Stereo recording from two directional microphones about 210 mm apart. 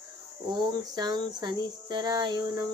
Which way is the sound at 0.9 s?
20° right (ahead or behind).